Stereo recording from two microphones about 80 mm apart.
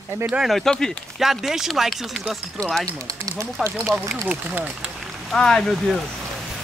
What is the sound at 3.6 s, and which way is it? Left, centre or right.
Speech, centre.